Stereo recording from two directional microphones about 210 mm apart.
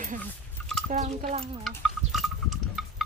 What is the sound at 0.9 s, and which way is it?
Speech, 30° right (ahead or behind).